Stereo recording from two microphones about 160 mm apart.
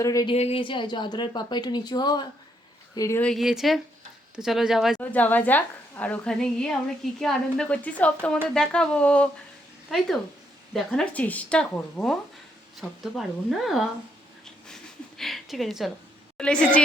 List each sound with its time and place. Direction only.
0.0 s speech: 20° left (ahead or behind)
0.3 s speech: 35° left (ahead or behind); by 3.2 s 20° left (ahead or behind)
3.2 s speech: centre (ahead or behind)
4.9 s a woman's voice: 10° left (ahead or behind)
15.2 s a woman's voice: centre (ahead or behind)